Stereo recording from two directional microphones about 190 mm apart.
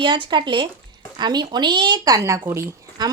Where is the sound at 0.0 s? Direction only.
25° right (ahead or behind).